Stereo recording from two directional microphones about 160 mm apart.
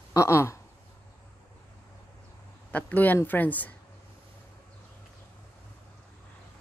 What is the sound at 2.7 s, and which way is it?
Speech, 10° left (ahead or behind).